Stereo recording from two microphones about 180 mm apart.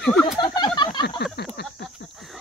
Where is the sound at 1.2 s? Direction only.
70° left (ahead or behind).